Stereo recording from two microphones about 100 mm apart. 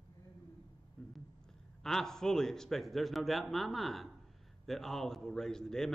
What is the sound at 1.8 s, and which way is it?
A man's voice, 5° left (ahead or behind).